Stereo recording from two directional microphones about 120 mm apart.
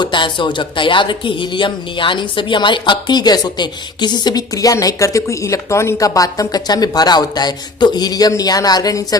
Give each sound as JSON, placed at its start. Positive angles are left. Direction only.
{"t": 0.0, "sound": "speech", "side_deg": 40}